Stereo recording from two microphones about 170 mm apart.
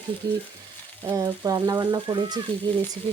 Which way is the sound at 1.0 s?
20° right (ahead or behind).